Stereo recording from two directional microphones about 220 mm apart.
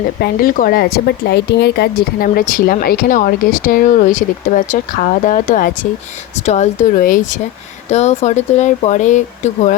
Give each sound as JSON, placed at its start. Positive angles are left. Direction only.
{"t": 0.2, "sound": "speech", "side_deg": 40}